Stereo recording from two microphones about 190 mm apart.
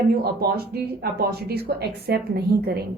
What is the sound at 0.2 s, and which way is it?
A woman's voice, 55° right (ahead or behind).